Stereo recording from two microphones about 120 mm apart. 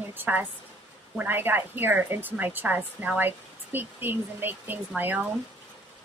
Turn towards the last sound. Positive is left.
turn(degrees=-15)  # may be behind; listen again after turning